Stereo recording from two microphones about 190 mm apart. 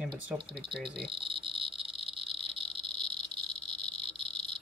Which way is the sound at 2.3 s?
30° right (ahead or behind).